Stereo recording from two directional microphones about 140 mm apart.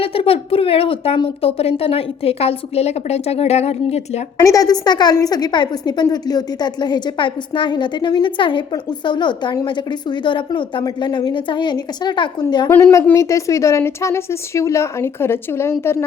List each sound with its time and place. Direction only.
0.0 s speech: 40° left (ahead or behind)
4.4 s a woman's voice: 25° left (ahead or behind)
12.6 s a woman's voice: 20° left (ahead or behind)